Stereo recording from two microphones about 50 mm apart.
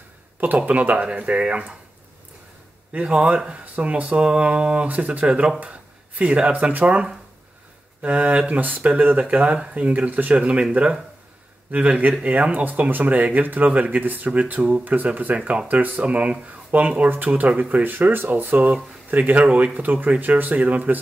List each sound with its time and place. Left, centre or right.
0.6 s speech: right
2.9 s speech: right
19.3 s speech: right